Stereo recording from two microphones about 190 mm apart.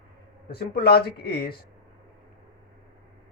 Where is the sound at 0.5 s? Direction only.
55° left (ahead or behind).